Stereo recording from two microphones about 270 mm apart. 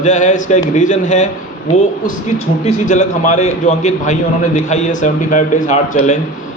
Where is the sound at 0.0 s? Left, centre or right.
Left.